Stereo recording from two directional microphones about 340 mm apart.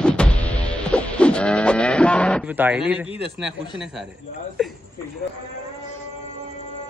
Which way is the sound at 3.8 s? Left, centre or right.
Centre.